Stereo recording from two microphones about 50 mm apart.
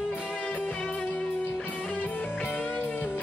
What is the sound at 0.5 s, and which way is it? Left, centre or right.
Music, left.